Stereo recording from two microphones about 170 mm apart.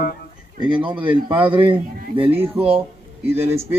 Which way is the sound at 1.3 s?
10° right (ahead or behind).